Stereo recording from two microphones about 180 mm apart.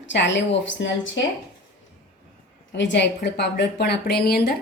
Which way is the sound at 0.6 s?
90° left.